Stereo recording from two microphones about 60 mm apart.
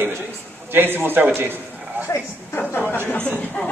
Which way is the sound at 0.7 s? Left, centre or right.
Right.